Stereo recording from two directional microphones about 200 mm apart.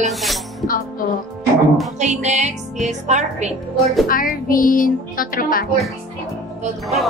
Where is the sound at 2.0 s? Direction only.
35° right (ahead or behind).